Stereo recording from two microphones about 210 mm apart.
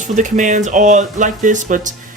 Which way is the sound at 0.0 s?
35° right (ahead or behind).